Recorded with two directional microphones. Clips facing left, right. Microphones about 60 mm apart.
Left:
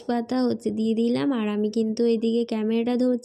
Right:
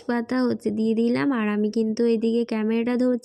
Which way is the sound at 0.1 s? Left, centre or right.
Right.